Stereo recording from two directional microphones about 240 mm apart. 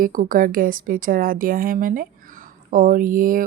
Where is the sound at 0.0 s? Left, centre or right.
Right.